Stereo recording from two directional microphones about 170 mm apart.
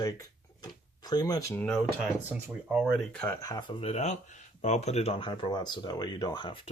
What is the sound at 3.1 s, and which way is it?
Speech, 10° left (ahead or behind).